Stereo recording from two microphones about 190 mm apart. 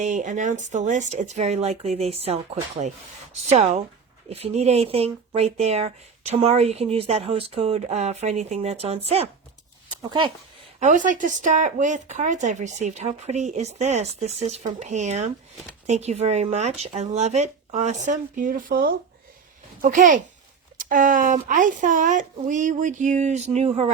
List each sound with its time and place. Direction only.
0.0 s speech: 40° right (ahead or behind)
10.8 s speech: 40° right (ahead or behind)